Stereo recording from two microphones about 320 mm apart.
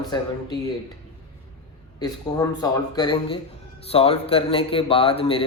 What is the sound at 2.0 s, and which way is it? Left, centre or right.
A man's voice, centre.